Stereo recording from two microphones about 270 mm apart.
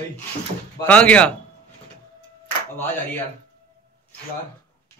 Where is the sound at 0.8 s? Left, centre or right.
Centre.